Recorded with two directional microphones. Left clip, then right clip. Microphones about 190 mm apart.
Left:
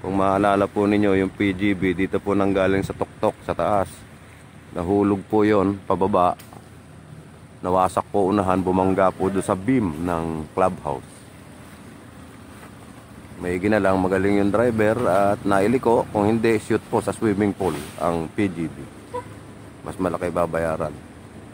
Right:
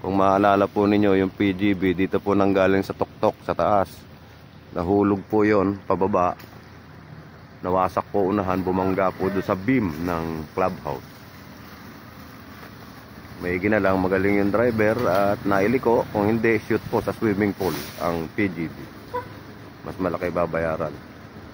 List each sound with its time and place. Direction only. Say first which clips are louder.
0.0 s speech: right 1 dB; 5° right (ahead or behind); by 6.3 s 15° left (ahead or behind)
7.6 s speech: left 2 dB; 10° left (ahead or behind)
13.4 s speech: left 1 dB; 15° left (ahead or behind)
20.0 s speech: left 1 dB; 15° left (ahead or behind)